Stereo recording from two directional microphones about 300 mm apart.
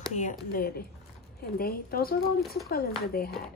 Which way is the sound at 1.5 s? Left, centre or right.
Left.